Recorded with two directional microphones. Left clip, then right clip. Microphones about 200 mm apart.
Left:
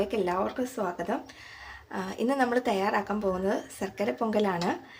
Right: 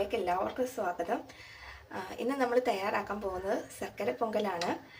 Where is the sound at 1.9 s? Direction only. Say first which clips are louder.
Left 6 dB; 45° left (ahead or behind).